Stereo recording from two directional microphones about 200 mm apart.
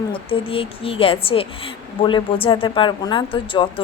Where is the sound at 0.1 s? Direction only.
25° left (ahead or behind).